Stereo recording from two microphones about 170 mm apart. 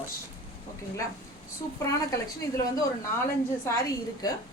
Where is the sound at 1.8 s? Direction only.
20° left (ahead or behind).